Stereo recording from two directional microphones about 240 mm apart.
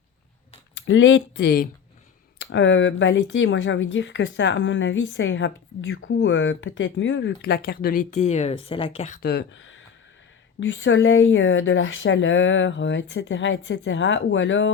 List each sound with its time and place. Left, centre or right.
0.9 s speech: left